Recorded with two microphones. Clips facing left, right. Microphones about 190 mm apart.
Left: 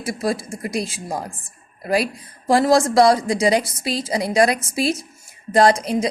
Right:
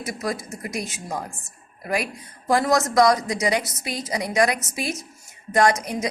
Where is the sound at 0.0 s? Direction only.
30° left (ahead or behind).